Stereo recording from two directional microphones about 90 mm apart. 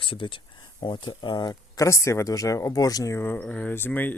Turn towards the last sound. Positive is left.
turn(degrees=20)  # may be behind; listen again after turning